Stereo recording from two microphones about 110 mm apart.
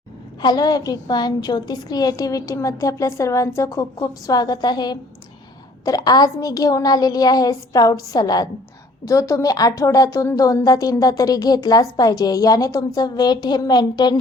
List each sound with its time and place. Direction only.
0.4 s a woman's voice: 35° left (ahead or behind)